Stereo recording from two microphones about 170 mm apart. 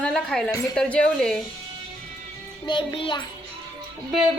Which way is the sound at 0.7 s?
5° left (ahead or behind).